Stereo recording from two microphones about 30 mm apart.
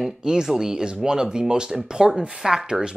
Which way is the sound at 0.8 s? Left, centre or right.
Right.